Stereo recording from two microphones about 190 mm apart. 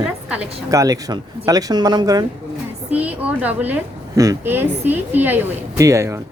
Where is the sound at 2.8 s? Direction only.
10° right (ahead or behind).